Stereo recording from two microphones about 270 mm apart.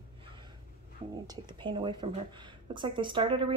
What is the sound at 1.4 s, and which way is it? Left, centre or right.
Speech, centre.